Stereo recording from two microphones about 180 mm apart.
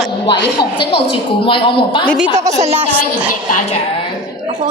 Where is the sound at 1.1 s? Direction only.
30° left (ahead or behind).